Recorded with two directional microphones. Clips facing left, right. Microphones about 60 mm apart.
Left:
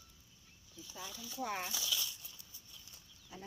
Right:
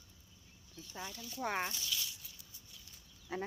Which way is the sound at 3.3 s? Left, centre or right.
Right.